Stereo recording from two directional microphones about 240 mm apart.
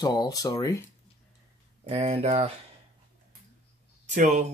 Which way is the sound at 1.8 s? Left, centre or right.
Right.